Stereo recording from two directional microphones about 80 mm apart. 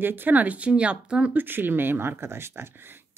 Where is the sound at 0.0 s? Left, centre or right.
Right.